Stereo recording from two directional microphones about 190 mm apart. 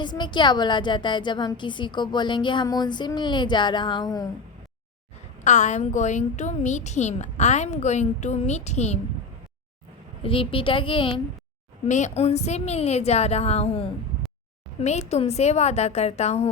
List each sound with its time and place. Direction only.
0.0 s a woman's voice: 25° left (ahead or behind)
5.4 s a woman's voice: 40° left (ahead or behind)
10.2 s a woman's voice: 30° left (ahead or behind)
11.9 s a woman's voice: 40° left (ahead or behind)